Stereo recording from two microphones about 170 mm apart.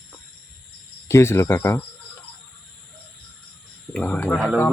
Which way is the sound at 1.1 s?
15° left (ahead or behind).